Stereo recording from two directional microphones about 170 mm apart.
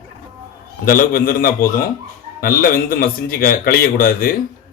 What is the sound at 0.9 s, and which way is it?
A man's voice, 60° left (ahead or behind).